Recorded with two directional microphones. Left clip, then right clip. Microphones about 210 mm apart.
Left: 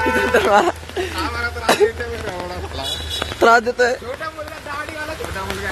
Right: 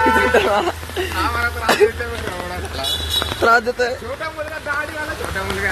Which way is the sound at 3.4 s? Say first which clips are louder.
Left 3 dB; 35° left (ahead or behind).